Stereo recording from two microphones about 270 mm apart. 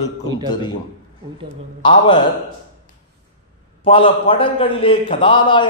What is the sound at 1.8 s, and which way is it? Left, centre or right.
Speech, centre.